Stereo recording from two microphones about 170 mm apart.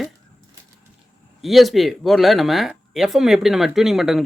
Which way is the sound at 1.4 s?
Centre (ahead or behind).